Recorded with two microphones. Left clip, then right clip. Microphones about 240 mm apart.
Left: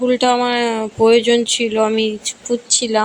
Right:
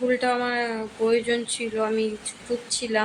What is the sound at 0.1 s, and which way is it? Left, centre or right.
A woman's voice, left.